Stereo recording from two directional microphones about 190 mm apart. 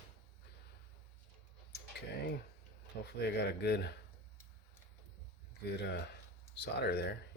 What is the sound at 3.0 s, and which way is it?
Speech, 60° left (ahead or behind).